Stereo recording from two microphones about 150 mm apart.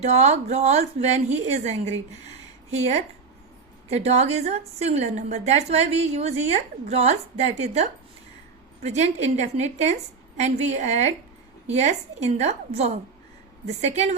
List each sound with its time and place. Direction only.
0.0 s a woman's voice: 50° right (ahead or behind)